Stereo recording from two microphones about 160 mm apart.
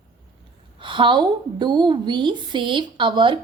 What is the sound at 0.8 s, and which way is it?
A woman's voice, 30° right (ahead or behind).